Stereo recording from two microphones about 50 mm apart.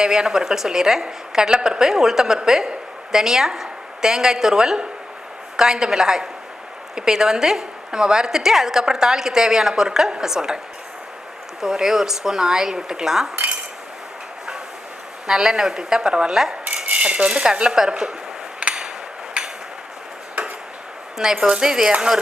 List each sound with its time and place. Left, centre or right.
0.0 s a woman's voice: centre
11.6 s a woman's voice: centre
15.3 s a woman's voice: centre
16.6 s cutlery: right
18.6 s hammer: centre
19.4 s a sound: centre
21.3 s cutlery: right
21.6 s a woman's voice: centre